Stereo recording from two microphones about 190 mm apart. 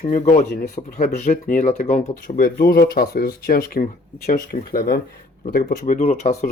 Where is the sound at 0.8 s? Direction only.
40° left (ahead or behind).